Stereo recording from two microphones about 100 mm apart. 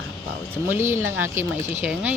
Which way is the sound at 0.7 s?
25° right (ahead or behind).